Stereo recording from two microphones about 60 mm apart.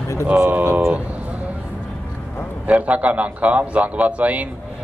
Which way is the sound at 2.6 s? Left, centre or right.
Right.